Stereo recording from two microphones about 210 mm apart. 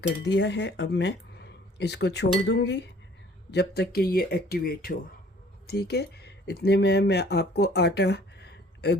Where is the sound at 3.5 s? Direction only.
50° left (ahead or behind).